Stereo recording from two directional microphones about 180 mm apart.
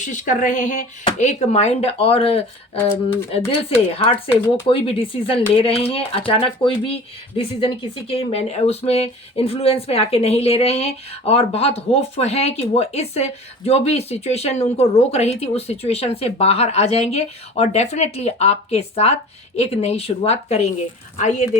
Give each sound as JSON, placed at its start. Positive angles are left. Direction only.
{"t": 0.0, "sound": "speech", "side_deg": 45}
{"t": 4.3, "sound": "speech", "side_deg": 15}
{"t": 4.7, "sound": "speech", "side_deg": 30}